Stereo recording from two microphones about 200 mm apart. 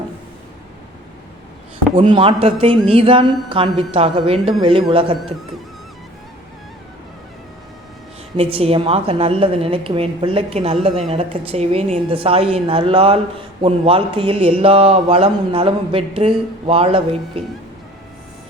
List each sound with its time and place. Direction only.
2.0 s a man's voice: 25° right (ahead or behind)
8.4 s a man's voice: 30° right (ahead or behind)